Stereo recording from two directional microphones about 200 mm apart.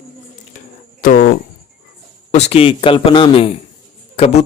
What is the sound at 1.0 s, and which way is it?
Speech, 45° left (ahead or behind).